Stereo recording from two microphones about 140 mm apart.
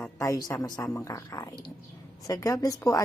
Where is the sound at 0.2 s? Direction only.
25° left (ahead or behind).